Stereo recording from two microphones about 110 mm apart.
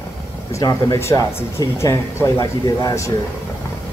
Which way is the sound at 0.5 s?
35° left (ahead or behind).